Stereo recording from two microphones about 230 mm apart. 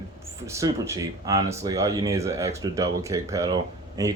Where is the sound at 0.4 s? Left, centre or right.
Centre.